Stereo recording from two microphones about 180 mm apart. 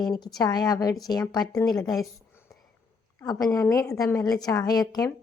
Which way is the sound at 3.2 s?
20° left (ahead or behind).